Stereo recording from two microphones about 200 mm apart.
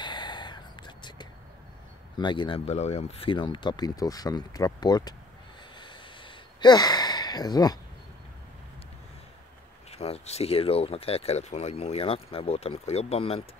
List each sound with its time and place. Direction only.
0.0 s whispering: 20° left (ahead or behind)
2.1 s speech: 25° left (ahead or behind)
5.8 s a sound: 25° left (ahead or behind)
9.8 s speech: 30° left (ahead or behind)